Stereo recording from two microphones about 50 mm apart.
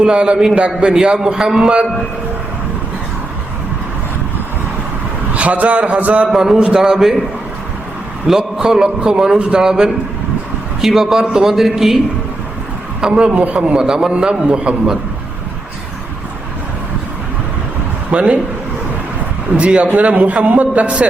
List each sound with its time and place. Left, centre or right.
0.0 s a man's voice: centre
5.3 s a man's voice: right
6.0 s a sound: right
6.2 s a man's voice: centre
8.3 s a man's voice: centre
13.0 s a man's voice: right
13.7 s a man's voice: centre
18.1 s speech: right
19.5 s a man's voice: right